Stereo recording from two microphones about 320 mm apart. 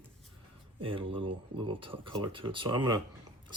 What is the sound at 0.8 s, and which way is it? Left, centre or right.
Speech, centre.